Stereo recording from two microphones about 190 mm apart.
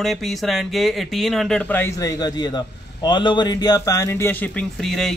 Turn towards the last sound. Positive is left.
turn(degrees=0)  # may be behind; listen again after turning